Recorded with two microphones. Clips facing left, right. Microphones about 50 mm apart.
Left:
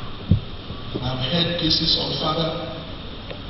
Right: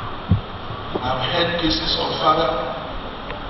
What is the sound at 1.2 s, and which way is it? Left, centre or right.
A man's voice, centre.